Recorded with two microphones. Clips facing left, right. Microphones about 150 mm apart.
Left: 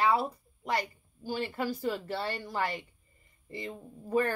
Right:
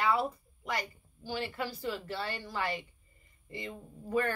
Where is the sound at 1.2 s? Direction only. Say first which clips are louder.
Left 3 dB; 40° left (ahead or behind).